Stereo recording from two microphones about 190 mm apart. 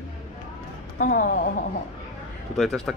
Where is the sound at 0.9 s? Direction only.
45° left (ahead or behind).